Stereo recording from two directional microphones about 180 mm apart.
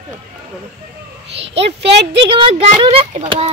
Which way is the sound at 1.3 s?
35° right (ahead or behind).